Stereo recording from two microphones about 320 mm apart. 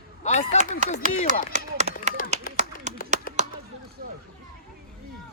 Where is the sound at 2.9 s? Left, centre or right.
Right.